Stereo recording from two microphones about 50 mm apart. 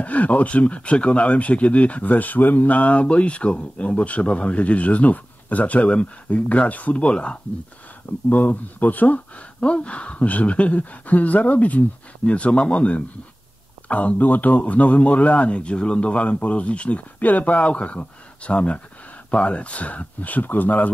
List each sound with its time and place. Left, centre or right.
0.0 s speech: left
8.3 s speech: left
9.6 s speech: left